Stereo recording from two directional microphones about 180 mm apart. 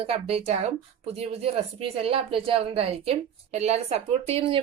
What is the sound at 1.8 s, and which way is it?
A woman's voice, 30° right (ahead or behind).